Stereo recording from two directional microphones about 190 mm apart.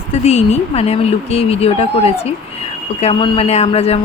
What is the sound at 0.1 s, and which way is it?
Speech, 35° left (ahead or behind).